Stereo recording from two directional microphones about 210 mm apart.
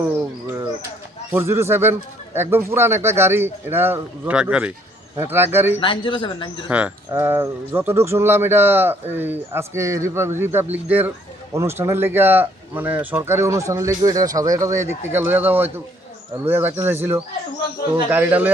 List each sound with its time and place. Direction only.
1.3 s speech: 10° right (ahead or behind)
5.8 s speech: 25° left (ahead or behind)
6.7 s speech: 5° right (ahead or behind)